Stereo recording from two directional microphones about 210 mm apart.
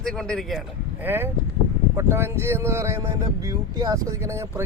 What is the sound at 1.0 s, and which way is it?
Speech, 10° right (ahead or behind).